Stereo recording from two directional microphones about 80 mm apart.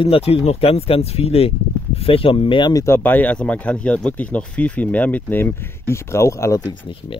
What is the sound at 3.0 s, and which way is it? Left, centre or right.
Speech, left.